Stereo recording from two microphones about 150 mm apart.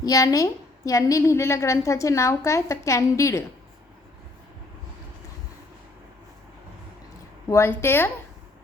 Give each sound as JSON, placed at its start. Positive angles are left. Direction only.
{"t": 0.0, "sound": "a woman's voice", "side_deg": 25}
{"t": 7.5, "sound": "speech", "side_deg": 15}